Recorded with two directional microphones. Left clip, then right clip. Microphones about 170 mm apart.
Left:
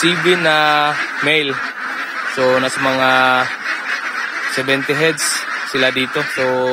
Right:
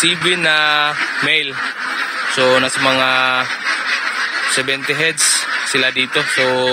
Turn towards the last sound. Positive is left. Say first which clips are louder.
# left 2 dB
turn(degrees=10)  # may be behind; listen again after turning